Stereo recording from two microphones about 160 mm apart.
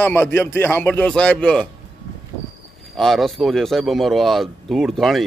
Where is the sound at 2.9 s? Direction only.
Centre (ahead or behind).